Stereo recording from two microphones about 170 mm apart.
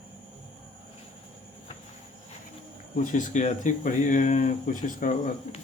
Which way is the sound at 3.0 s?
50° left (ahead or behind).